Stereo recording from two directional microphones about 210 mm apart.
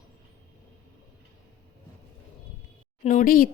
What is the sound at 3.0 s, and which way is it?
Speech, 40° left (ahead or behind).